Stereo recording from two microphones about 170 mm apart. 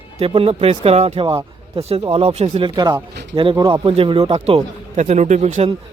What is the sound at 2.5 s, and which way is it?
A man's voice, 25° right (ahead or behind).